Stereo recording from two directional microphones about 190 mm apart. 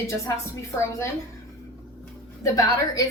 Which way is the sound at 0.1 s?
15° left (ahead or behind).